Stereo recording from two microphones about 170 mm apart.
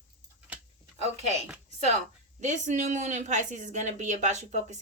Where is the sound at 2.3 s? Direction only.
45° right (ahead or behind).